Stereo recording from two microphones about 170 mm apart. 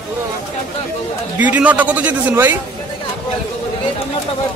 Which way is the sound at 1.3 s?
10° right (ahead or behind).